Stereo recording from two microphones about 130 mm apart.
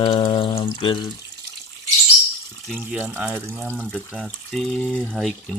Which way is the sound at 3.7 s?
10° left (ahead or behind).